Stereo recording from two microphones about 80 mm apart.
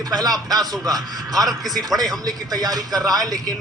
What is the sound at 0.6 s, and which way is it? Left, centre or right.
A man's voice, right.